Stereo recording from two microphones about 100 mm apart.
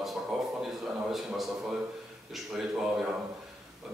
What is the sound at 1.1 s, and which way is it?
Speech, centre (ahead or behind).